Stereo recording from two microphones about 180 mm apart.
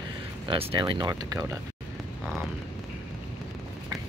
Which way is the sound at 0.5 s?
30° right (ahead or behind).